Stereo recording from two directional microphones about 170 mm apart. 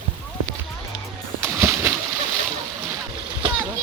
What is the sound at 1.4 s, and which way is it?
Splash, 15° right (ahead or behind).